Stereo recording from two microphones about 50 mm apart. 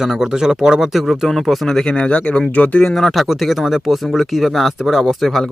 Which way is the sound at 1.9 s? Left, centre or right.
Left.